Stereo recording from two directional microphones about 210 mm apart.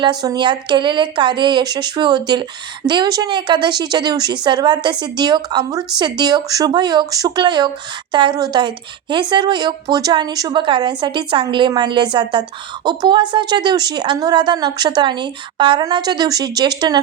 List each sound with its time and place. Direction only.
0.0 s a woman's voice: 20° right (ahead or behind)